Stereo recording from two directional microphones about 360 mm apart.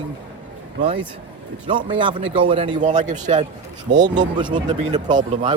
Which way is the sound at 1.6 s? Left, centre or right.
Centre.